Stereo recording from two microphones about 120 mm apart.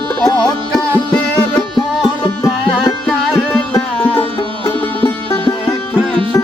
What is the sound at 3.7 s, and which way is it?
Music, 15° left (ahead or behind).